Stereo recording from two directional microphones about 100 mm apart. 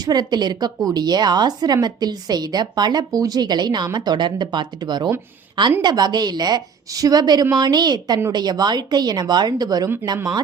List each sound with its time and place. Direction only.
0.0 s a woman's voice: 45° right (ahead or behind)